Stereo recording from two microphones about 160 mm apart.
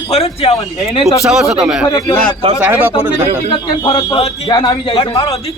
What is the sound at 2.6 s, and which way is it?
Speech, 10° right (ahead or behind).